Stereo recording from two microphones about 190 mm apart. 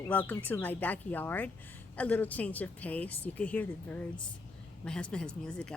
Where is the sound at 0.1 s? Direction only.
10° left (ahead or behind).